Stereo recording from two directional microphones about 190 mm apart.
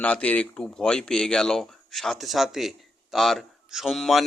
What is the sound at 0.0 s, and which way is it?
Speech, 5° left (ahead or behind).